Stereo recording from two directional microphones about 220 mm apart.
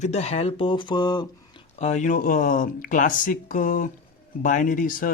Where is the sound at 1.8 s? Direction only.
30° left (ahead or behind).